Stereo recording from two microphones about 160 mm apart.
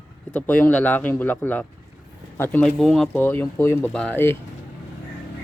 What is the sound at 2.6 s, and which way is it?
Speech, centre (ahead or behind).